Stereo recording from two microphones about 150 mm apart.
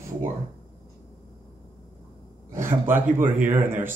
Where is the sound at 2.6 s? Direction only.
15° right (ahead or behind).